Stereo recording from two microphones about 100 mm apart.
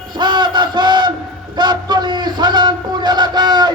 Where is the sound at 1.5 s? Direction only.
45° right (ahead or behind).